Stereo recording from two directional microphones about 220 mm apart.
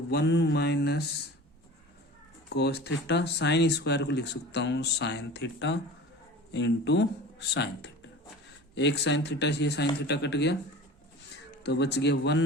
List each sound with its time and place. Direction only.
0.1 s speech: 50° left (ahead or behind)
2.5 s speech: 50° left (ahead or behind)
11.6 s speech: 50° left (ahead or behind)